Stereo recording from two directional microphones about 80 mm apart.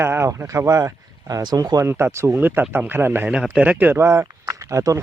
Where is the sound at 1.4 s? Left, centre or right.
Right.